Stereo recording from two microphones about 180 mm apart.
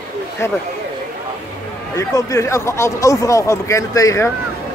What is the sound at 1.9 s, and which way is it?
Speech, 20° left (ahead or behind).